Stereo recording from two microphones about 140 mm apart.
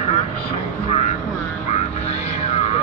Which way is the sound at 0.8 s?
55° left (ahead or behind).